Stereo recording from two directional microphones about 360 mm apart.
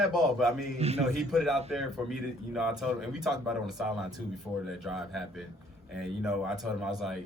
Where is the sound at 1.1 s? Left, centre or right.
Centre.